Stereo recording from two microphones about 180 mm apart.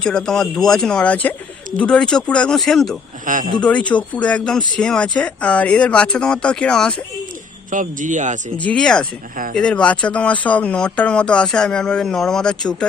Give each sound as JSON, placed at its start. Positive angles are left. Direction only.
{"t": 0.0, "sound": "speech", "side_deg": 5}
{"t": 3.2, "sound": "a man's voice", "side_deg": -45}
{"t": 3.6, "sound": "speech", "side_deg": 5}
{"t": 7.7, "sound": "a man's voice", "side_deg": -45}
{"t": 8.5, "sound": "speech", "side_deg": 5}